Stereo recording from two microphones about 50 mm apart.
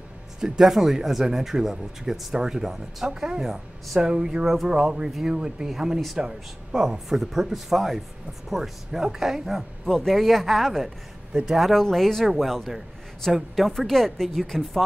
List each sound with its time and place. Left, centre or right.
0.4 s a man's voice: centre
9.8 s a man's voice: centre
11.8 s a man's voice: centre